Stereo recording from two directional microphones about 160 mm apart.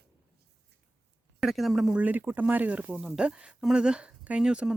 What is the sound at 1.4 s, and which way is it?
Speech, centre (ahead or behind).